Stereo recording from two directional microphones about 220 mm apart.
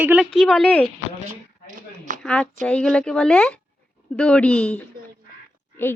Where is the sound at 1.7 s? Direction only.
35° right (ahead or behind).